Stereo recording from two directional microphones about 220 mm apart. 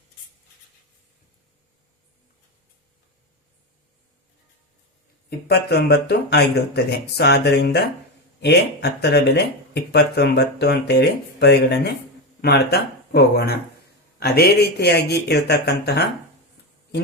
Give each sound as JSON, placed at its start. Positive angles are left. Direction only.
{"t": 5.5, "sound": "speech", "side_deg": 45}